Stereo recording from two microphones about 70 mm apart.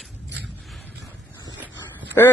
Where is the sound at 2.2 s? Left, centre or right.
Left.